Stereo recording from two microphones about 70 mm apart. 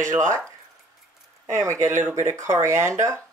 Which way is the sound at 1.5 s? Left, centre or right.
Right.